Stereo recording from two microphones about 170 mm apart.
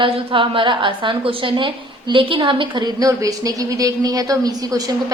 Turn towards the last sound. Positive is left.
turn(degrees=-20)  # may be behind; listen again after turning